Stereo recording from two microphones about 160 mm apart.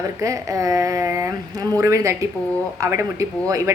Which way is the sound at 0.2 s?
20° right (ahead or behind).